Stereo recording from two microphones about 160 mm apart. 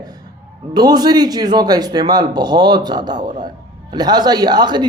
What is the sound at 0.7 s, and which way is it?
A woman's voice, 25° right (ahead or behind).